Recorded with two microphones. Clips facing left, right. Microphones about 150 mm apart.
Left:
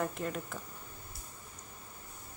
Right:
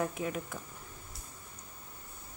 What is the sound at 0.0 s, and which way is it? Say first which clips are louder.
Speech: right 1 dB; 5° right (ahead or behind).